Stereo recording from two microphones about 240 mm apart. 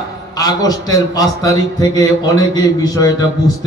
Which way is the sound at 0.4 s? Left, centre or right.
Centre.